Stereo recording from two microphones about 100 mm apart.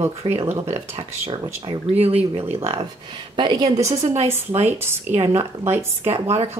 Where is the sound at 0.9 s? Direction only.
90° right.